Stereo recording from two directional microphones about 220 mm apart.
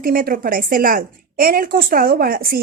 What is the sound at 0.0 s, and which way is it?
A woman's voice, 40° right (ahead or behind).